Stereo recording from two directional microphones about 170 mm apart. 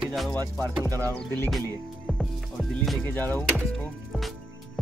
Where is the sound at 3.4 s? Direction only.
Centre (ahead or behind).